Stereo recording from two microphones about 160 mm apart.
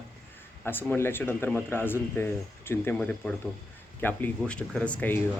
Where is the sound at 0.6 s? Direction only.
15° left (ahead or behind).